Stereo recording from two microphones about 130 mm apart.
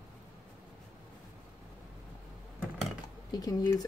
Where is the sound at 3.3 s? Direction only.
30° left (ahead or behind).